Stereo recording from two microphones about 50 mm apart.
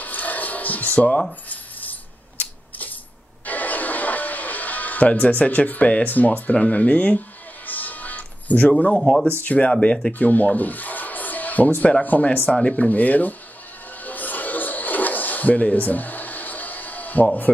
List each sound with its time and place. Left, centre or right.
0.0 s a sound: left
1.5 s coin: left
3.4 s music: left
6.0 s speech: left
6.5 s music: left
9.4 s speech: left
10.1 s speech: left
14.0 s television: left